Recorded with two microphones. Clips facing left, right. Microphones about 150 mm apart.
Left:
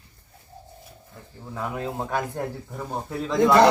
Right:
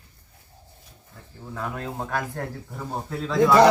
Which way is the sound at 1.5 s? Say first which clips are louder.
Left 2 dB; 15° left (ahead or behind).